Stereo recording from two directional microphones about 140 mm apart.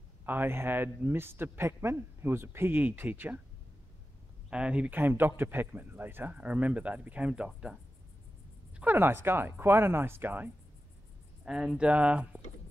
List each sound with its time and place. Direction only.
0.2 s a man's voice: 15° right (ahead or behind)
4.5 s a man's voice: 5° right (ahead or behind)
8.7 s a man's voice: 15° right (ahead or behind)